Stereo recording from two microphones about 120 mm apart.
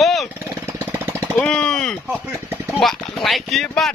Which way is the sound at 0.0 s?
Centre (ahead or behind).